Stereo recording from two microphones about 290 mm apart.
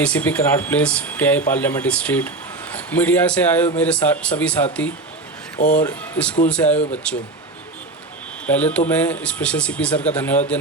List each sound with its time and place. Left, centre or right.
0.0 s speech: centre
5.5 s speech: left
5.8 s speech: centre
8.4 s speech: centre